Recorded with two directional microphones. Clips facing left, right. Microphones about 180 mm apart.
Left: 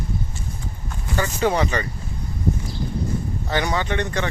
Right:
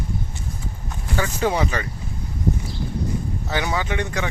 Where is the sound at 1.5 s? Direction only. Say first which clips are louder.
Left 1 dB; 5° right (ahead or behind).